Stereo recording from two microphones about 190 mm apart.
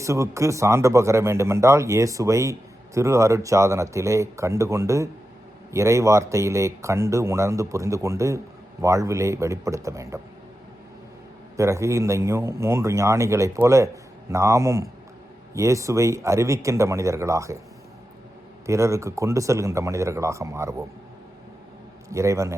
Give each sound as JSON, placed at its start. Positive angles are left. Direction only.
{"t": 0.0, "sound": "speech", "side_deg": -15}
{"t": 11.5, "sound": "speech", "side_deg": -15}
{"t": 18.6, "sound": "speech", "side_deg": -15}
{"t": 22.1, "sound": "speech", "side_deg": -15}